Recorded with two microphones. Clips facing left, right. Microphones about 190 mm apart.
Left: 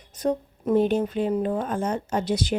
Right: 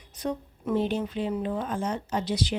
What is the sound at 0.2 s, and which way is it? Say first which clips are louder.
Speech: left 6 dB; 45° left (ahead or behind).